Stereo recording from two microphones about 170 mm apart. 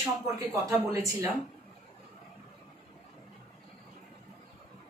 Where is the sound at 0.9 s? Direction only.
20° right (ahead or behind).